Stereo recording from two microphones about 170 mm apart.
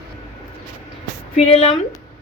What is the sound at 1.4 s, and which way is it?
Speech, 35° left (ahead or behind).